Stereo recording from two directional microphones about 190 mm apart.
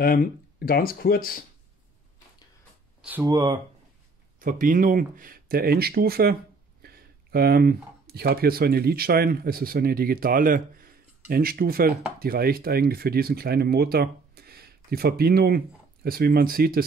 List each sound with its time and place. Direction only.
0.0 s speech: 55° left (ahead or behind)
3.0 s a sound: 10° right (ahead or behind)
3.3 s speech: 20° right (ahead or behind)
4.4 s speech: 45° right (ahead or behind)